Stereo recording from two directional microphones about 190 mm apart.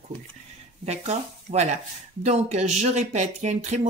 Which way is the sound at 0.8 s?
35° right (ahead or behind).